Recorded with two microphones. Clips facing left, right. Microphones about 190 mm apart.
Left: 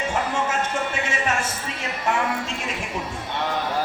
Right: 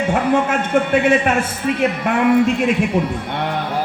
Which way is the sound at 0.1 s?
60° right (ahead or behind).